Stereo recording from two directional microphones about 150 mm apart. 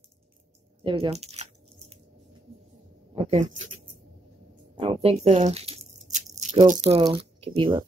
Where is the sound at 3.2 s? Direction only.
45° right (ahead or behind).